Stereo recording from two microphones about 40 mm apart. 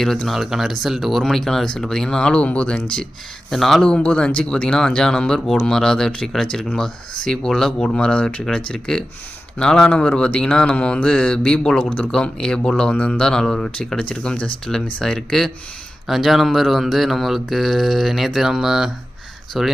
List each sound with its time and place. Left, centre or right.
0.3 s speech: centre
1.2 s speech: centre
2.4 s speech: left
3.5 s speech: centre
3.8 s speech: left
7.9 s speech: left
15.0 s speech: centre